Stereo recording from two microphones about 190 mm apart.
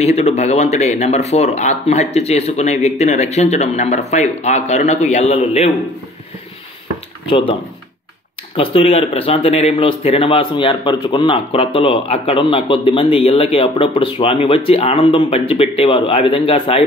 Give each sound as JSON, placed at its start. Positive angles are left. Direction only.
{"t": 0.0, "sound": "speech", "side_deg": 35}
{"t": 7.2, "sound": "speech", "side_deg": 30}
{"t": 8.5, "sound": "speech", "side_deg": 30}